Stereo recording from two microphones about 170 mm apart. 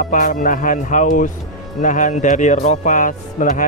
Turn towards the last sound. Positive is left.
turn(degrees=50)  # may be behind; listen again after turning